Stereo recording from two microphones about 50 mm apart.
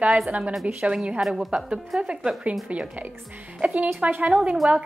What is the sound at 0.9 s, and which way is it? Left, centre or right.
Speech, right.